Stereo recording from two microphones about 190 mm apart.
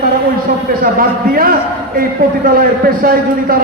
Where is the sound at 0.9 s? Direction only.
50° right (ahead or behind).